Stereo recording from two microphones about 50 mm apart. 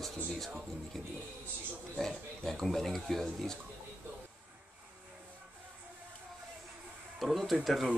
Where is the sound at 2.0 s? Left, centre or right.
Centre.